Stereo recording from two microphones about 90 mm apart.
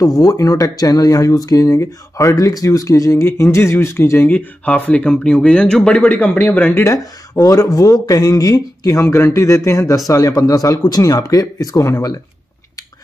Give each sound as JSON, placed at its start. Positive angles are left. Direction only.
{"t": 0.0, "sound": "speech", "side_deg": 40}
{"t": 6.8, "sound": "speech", "side_deg": 40}